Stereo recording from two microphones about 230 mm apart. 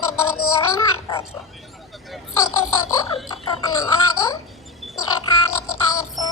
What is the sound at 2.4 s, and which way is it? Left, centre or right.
Speech, left.